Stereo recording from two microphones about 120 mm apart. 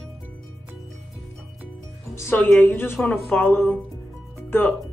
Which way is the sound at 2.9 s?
5° left (ahead or behind).